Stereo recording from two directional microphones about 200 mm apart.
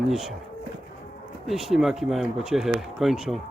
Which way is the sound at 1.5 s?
Centre (ahead or behind).